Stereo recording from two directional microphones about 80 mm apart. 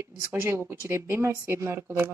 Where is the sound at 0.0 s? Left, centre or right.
Right.